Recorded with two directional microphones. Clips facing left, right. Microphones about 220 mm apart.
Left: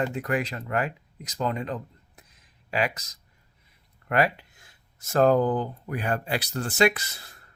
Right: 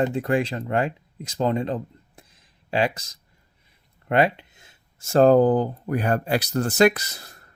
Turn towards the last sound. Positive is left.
turn(degrees=-40)  # may be behind; listen again after turning